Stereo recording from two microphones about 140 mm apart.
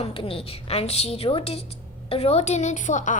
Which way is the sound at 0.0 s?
40° left (ahead or behind).